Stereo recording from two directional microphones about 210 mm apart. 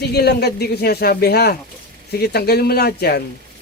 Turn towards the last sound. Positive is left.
turn(degrees=50)  # may be behind; listen again after turning